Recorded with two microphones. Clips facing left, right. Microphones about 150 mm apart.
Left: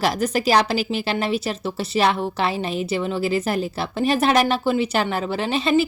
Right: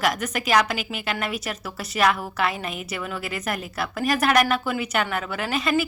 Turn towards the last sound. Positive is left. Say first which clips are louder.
# left 4 dB
turn(degrees=30)  # may be behind; listen again after turning